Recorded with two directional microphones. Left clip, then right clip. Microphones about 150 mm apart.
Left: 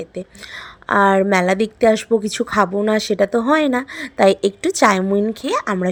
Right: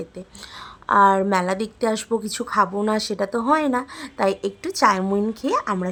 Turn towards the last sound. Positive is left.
turn(degrees=25)  # may be behind; listen again after turning